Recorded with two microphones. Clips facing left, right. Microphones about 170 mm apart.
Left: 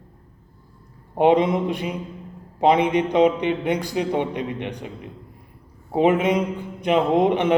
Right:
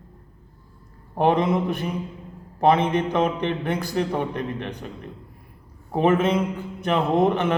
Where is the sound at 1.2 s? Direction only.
15° left (ahead or behind).